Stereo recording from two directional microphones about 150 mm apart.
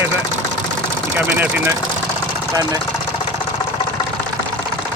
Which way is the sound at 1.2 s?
15° right (ahead or behind).